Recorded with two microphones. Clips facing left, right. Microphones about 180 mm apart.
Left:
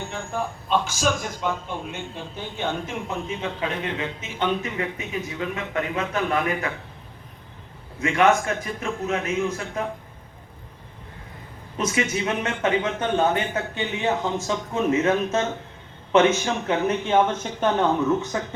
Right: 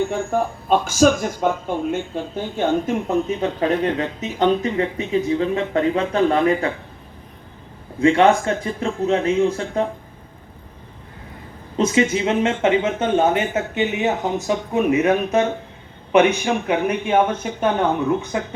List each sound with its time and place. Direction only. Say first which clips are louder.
0.1 s speech: right 8 dB; 50° right (ahead or behind); by 6.7 s 30° right (ahead or behind)
7.9 s speech: right 5 dB; 30° right (ahead or behind)
11.9 s speech: right 7 dB; 25° right (ahead or behind)